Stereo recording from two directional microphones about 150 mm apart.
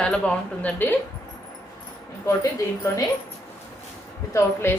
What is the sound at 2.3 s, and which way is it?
Speech, 20° left (ahead or behind).